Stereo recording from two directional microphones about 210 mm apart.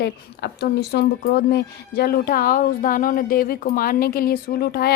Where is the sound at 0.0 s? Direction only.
50° left (ahead or behind).